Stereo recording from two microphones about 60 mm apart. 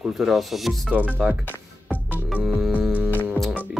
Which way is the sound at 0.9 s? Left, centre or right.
Right.